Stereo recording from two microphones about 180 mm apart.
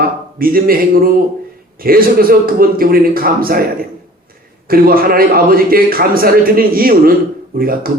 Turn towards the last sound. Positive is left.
turn(degrees=-55)  # may be behind; listen again after turning